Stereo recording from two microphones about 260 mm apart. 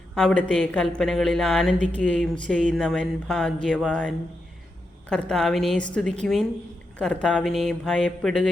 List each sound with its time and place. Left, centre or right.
0.1 s speech: centre